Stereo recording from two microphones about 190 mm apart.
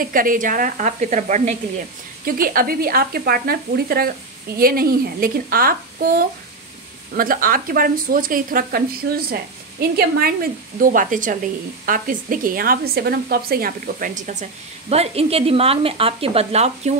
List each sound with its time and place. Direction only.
0.0 s a woman's voice: 45° right (ahead or behind)
2.2 s a woman's voice: 50° right (ahead or behind)
14.9 s speech: 30° right (ahead or behind)